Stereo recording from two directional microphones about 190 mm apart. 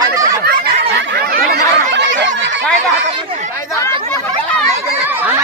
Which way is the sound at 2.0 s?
70° right (ahead or behind).